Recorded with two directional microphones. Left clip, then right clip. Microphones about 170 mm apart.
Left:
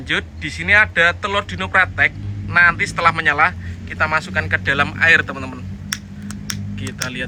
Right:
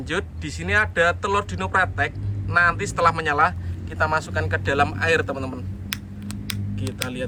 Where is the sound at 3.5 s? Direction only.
15° left (ahead or behind).